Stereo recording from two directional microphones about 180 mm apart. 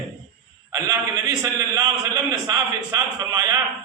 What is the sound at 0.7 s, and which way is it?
A man's voice, 20° right (ahead or behind).